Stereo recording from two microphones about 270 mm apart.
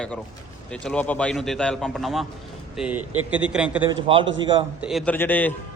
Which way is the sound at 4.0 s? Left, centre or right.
Centre.